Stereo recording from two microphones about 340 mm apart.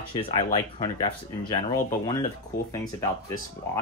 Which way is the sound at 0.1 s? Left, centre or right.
Centre.